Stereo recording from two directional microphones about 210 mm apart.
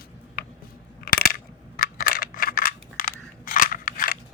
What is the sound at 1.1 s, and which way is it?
Coin, 45° left (ahead or behind).